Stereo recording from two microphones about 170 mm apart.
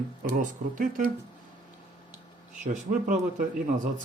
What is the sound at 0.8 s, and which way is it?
Speech, 50° right (ahead or behind).